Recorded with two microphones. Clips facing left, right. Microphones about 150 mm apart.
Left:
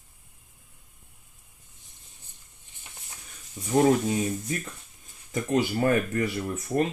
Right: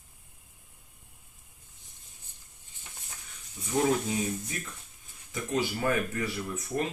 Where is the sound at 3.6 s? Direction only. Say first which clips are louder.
Left 5 dB; 25° left (ahead or behind).